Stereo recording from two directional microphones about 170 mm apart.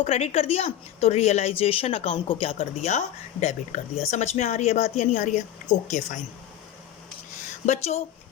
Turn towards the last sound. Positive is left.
turn(degrees=40)  # may be behind; listen again after turning